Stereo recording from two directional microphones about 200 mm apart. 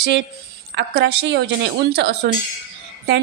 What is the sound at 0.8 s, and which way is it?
A woman's voice, 55° right (ahead or behind).